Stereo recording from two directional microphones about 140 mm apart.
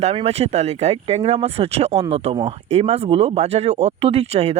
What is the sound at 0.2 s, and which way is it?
Speech, 50° right (ahead or behind).